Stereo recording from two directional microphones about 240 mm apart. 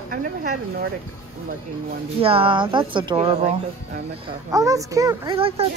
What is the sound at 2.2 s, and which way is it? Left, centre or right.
Speech, right.